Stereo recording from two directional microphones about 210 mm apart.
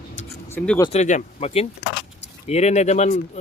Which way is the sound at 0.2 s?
35° left (ahead or behind).